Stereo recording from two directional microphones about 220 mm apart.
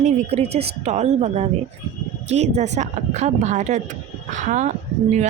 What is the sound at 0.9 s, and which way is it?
Speech, 30° right (ahead or behind).